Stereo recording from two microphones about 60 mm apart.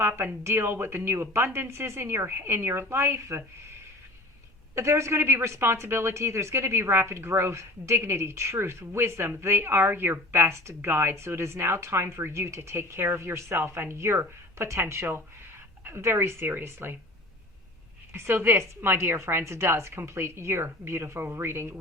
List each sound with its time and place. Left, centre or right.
0.4 s a woman's voice: right
4.7 s a woman's voice: right
18.1 s a woman's voice: right